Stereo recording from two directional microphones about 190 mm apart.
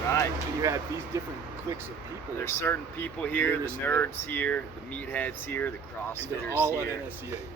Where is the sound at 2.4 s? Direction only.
15° left (ahead or behind).